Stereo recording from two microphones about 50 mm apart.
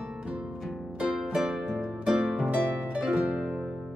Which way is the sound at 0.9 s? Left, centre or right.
Centre.